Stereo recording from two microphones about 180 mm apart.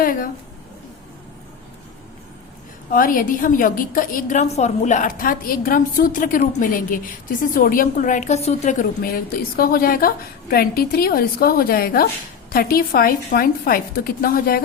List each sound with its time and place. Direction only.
0.0 s speech: 50° left (ahead or behind)
2.9 s a woman's voice: 50° left (ahead or behind)
9.0 s a woman's voice: 55° left (ahead or behind)